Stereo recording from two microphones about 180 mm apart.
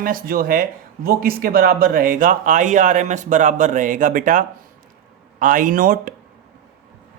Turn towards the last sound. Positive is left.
turn(degrees=-50)  # may be behind; listen again after turning